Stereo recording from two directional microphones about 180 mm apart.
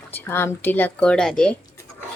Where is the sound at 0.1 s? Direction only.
10° left (ahead or behind).